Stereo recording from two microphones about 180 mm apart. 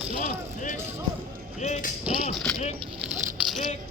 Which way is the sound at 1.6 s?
40° left (ahead or behind).